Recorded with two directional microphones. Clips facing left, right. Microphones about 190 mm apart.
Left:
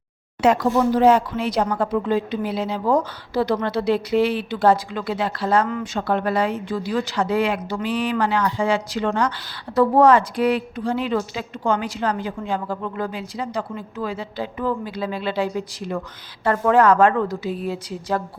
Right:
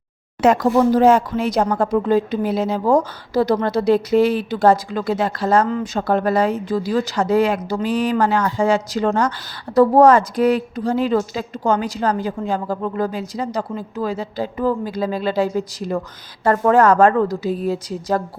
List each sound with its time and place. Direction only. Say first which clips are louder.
0.4 s a woman's voice: right 3 dB; 45° right (ahead or behind)